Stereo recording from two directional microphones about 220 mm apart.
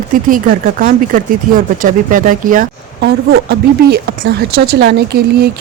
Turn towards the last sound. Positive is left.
turn(degrees=-45)  # may be behind; listen again after turning